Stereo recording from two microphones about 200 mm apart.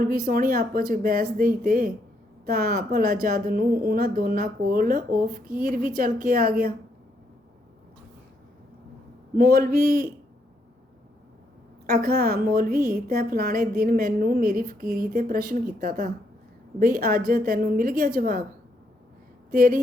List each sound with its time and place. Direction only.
0.0 s a woman's voice: 45° right (ahead or behind)
9.3 s a woman's voice: 45° right (ahead or behind)
12.0 s a woman's voice: 50° right (ahead or behind)
19.5 s a woman's voice: 45° right (ahead or behind)